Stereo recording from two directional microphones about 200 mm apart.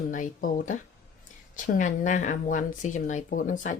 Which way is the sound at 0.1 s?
40° left (ahead or behind).